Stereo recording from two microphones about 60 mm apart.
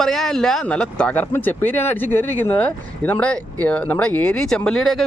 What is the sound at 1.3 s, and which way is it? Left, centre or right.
Speech, left.